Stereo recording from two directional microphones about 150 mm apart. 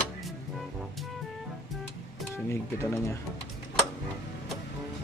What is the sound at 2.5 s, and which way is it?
Speech, 15° left (ahead or behind).